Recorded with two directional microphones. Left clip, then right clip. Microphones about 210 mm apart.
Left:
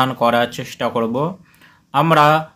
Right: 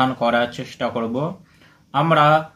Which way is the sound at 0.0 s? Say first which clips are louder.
Left 3 dB; 30° left (ahead or behind).